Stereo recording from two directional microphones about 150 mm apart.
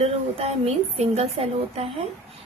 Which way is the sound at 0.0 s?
40° right (ahead or behind).